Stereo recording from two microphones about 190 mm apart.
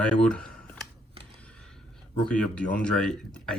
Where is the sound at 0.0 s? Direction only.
5° left (ahead or behind).